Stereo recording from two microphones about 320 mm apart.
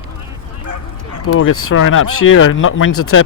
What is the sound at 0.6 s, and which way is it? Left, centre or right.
Bow-wow, right.